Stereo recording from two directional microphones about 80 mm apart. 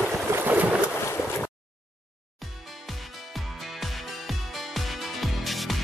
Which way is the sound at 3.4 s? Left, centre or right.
Centre.